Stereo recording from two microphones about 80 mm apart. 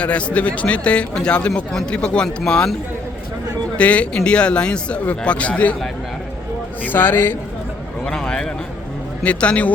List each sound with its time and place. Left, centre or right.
0.0 s speech: centre
3.8 s speech: centre
6.8 s speech: left
8.0 s a sound: centre
9.2 s speech: centre